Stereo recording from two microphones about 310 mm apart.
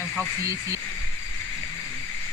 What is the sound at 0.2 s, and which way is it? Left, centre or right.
Speech, centre.